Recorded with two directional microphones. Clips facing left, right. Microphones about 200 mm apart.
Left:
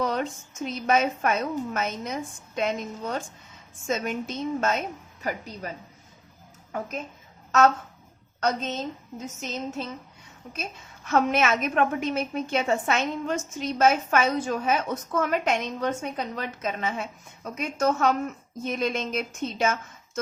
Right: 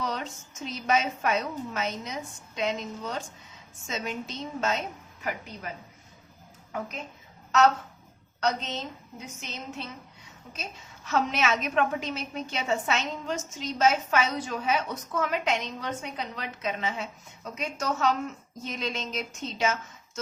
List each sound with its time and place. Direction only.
0.0 s a woman's voice: 55° left (ahead or behind)
8.4 s a woman's voice: 50° left (ahead or behind)
10.5 s a woman's voice: 55° left (ahead or behind)